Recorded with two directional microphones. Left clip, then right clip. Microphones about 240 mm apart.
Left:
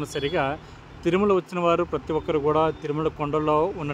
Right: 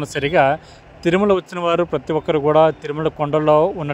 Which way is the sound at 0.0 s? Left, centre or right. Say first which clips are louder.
Right 9 dB; right.